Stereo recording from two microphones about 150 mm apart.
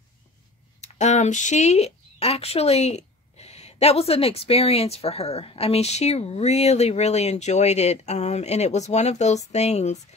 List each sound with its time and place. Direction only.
0.7 s speech: 50° left (ahead or behind)